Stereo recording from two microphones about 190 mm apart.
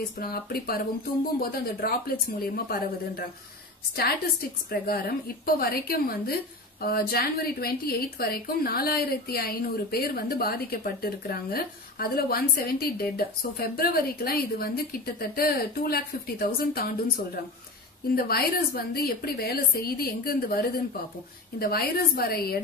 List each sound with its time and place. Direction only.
0.2 s a woman's voice: 50° left (ahead or behind)
18.1 s a woman's voice: 50° left (ahead or behind)